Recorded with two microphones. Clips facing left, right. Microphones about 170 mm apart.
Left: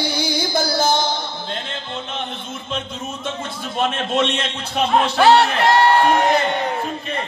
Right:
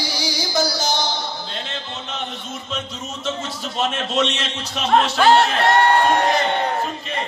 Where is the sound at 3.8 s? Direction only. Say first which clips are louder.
Left 2 dB; 55° left (ahead or behind).